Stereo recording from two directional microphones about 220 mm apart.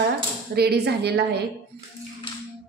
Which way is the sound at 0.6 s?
50° right (ahead or behind).